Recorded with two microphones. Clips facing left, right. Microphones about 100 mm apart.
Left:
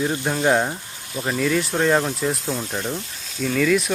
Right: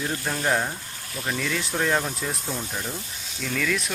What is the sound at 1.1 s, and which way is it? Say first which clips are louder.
Speech: left 5 dB; 30° left (ahead or behind).